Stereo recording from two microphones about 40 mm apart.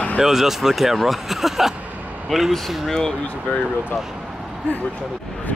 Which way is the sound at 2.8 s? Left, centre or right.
Centre.